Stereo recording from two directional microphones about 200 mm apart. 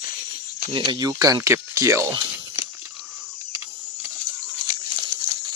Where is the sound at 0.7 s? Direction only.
20° right (ahead or behind).